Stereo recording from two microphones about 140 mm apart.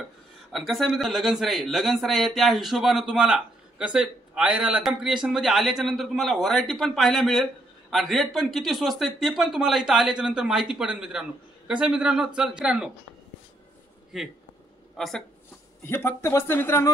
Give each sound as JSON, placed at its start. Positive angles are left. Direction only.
{"t": 0.5, "sound": "a man's voice", "side_deg": 0}
{"t": 14.1, "sound": "a man's voice", "side_deg": -5}
{"t": 15.8, "sound": "speech", "side_deg": 15}